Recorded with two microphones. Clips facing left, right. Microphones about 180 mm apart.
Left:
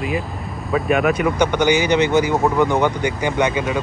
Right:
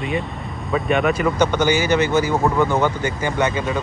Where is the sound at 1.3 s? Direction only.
15° left (ahead or behind).